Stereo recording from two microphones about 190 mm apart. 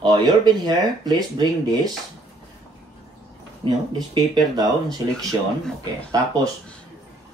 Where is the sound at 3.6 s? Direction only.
25° right (ahead or behind).